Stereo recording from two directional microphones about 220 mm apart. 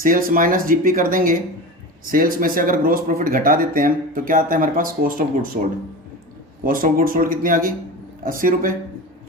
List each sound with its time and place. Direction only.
0.0 s speech: 40° right (ahead or behind)
6.7 s speech: 40° right (ahead or behind)